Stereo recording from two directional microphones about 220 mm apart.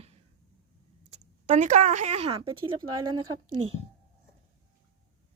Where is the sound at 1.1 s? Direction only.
30° right (ahead or behind).